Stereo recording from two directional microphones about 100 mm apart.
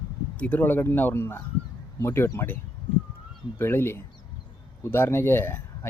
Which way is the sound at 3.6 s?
25° left (ahead or behind).